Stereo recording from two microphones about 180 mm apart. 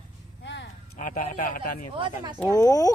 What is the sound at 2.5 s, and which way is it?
Speech, 20° left (ahead or behind).